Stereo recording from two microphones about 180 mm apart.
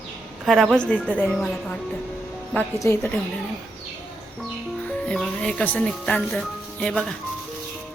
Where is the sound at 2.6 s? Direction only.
15° left (ahead or behind).